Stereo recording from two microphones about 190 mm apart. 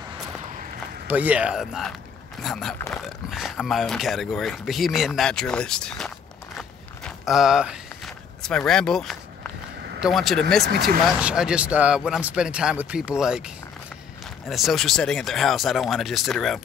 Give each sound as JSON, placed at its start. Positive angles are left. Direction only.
{"t": 1.0, "sound": "speech", "side_deg": -10}
{"t": 10.6, "sound": "speech", "side_deg": -60}
{"t": 11.1, "sound": "speech", "side_deg": -5}
{"t": 14.5, "sound": "speech", "side_deg": 0}